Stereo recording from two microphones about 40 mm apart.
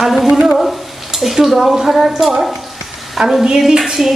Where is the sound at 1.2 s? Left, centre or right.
Centre.